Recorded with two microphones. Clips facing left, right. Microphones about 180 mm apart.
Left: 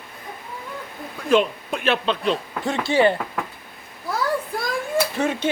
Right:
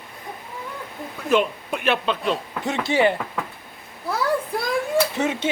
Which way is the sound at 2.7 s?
20° right (ahead or behind).